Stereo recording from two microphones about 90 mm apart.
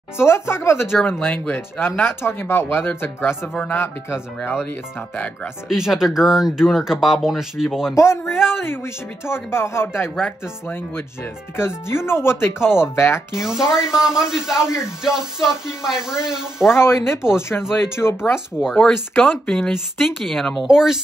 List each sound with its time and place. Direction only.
0.2 s speech: 30° left (ahead or behind)
1.2 s speech: 15° left (ahead or behind)
1.5 s speech: 25° left (ahead or behind)
5.1 s speech: 15° left (ahead or behind)
5.7 s speech: 5° right (ahead or behind)
7.9 s speech: 30° left (ahead or behind)
8.3 s speech: 5° right (ahead or behind)
8.6 s speech: 25° left (ahead or behind)
13.4 s speech: 5° right (ahead or behind)
16.7 s speech: 30° left (ahead or behind)
18.8 s speech: 15° left (ahead or behind)
19.7 s speech: 5° right (ahead or behind)